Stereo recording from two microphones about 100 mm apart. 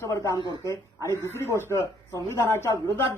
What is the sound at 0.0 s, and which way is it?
A woman's voice, 35° left (ahead or behind).